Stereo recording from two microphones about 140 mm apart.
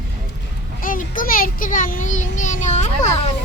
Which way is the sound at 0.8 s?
75° left (ahead or behind).